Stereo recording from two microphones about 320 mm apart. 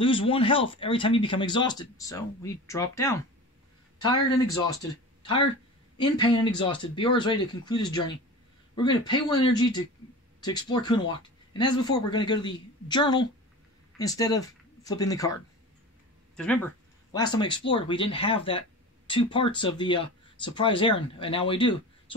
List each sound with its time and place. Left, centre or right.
0.0 s speech: centre
16.3 s speech: centre